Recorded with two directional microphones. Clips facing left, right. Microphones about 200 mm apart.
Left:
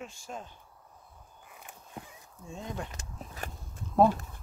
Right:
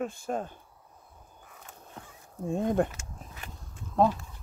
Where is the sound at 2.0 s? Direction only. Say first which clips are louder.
Left 3 dB; 10° left (ahead or behind).